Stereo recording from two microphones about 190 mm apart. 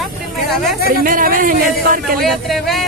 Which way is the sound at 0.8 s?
50° right (ahead or behind).